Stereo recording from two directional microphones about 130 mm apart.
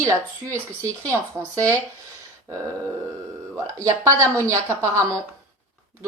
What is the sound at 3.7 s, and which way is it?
Speech, 25° right (ahead or behind).